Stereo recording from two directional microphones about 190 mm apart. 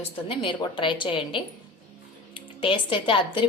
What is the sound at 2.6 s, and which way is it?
Speech, 25° left (ahead or behind).